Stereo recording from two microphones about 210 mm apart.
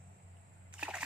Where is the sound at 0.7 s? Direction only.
5° right (ahead or behind).